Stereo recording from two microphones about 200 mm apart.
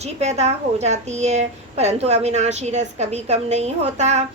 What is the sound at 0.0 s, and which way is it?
A woman's voice, 35° right (ahead or behind).